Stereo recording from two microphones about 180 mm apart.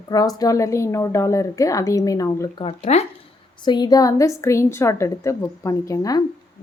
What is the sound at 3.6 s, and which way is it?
Speech, 25° left (ahead or behind).